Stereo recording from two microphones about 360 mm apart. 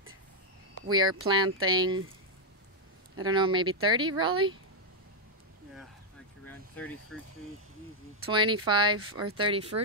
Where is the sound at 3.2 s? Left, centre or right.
Centre.